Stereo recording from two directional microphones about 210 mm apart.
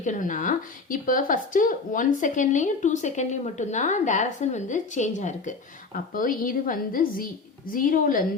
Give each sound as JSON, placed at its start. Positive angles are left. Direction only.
{"t": 0.0, "sound": "speech", "side_deg": 35}